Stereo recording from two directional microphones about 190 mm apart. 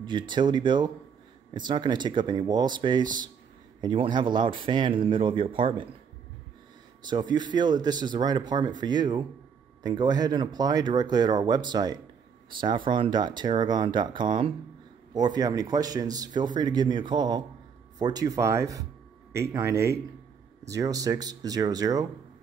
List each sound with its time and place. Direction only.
0.0 s speech: 25° right (ahead or behind)
7.0 s speech: 20° right (ahead or behind)